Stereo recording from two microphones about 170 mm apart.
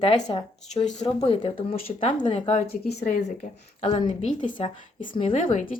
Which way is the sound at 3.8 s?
30° left (ahead or behind).